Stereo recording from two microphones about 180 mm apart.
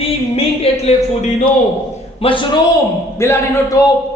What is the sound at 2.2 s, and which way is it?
Speech, 30° left (ahead or behind).